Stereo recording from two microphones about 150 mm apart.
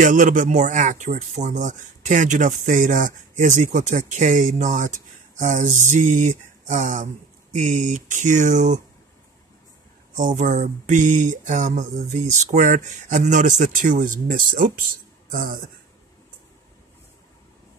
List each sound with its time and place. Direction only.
0.0 s speech: 55° right (ahead or behind)
10.1 s speech: 60° right (ahead or behind)